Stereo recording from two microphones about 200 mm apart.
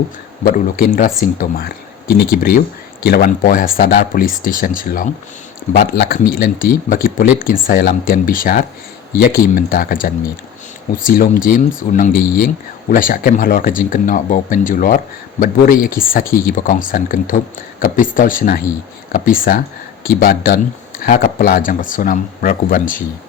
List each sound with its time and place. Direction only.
0.4 s speech: 45° left (ahead or behind)